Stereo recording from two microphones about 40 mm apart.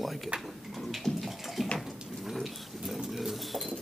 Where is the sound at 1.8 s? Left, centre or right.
Centre.